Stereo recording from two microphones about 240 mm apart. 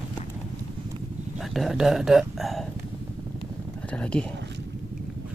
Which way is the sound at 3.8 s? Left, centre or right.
Centre.